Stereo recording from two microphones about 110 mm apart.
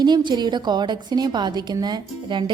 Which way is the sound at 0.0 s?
45° right (ahead or behind).